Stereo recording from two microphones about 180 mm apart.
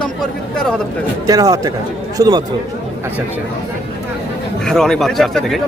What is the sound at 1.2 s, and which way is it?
Speech, 20° right (ahead or behind).